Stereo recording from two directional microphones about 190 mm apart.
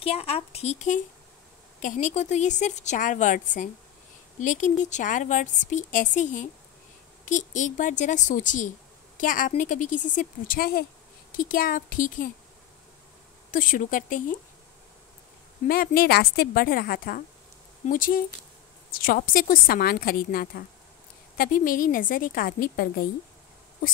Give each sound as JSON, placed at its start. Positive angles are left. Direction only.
{"t": 0.0, "sound": "a woman's voice", "side_deg": 30}
{"t": 13.5, "sound": "a woman's voice", "side_deg": 45}
{"t": 15.6, "sound": "a woman's voice", "side_deg": 50}